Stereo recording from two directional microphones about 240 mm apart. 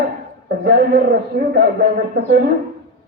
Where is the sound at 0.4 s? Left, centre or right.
Right.